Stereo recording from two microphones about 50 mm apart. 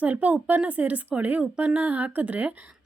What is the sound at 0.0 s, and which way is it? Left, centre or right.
A woman's voice, right.